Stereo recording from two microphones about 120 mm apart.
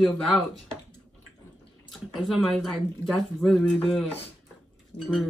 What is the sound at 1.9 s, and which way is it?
Speech, centre (ahead or behind).